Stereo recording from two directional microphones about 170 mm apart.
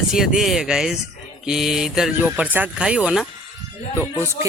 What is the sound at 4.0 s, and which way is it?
Speech, 15° right (ahead or behind).